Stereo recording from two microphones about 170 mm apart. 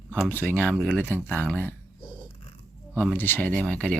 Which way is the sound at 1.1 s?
10° left (ahead or behind).